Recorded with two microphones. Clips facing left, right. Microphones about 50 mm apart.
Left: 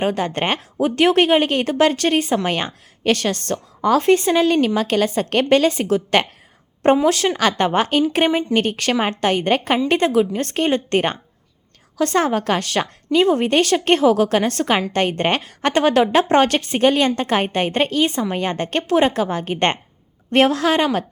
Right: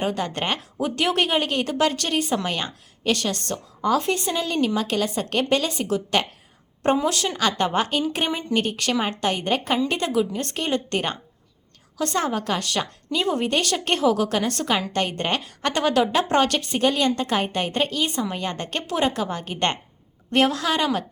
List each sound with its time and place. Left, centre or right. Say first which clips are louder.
0.0 s a woman's voice: left 5 dB; left
11.9 s speech: left 6 dB; left
20.3 s a woman's voice: left 5 dB; left